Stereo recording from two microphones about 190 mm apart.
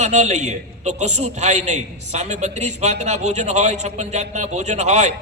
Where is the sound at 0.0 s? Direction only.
35° right (ahead or behind).